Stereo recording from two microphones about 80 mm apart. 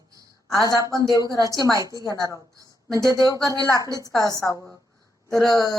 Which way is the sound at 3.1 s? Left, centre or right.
Right.